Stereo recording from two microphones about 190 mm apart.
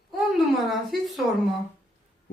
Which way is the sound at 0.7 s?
Centre (ahead or behind).